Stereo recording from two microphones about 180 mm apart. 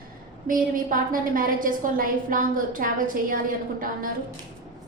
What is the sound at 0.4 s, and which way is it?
A woman's voice, 50° right (ahead or behind).